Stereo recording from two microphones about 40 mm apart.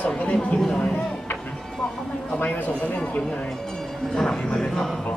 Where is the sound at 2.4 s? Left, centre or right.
Left.